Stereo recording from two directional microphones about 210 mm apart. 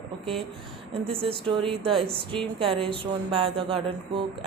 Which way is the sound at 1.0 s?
25° right (ahead or behind).